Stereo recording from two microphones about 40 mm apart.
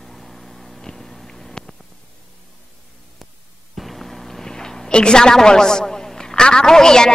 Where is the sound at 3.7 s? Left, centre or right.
Centre.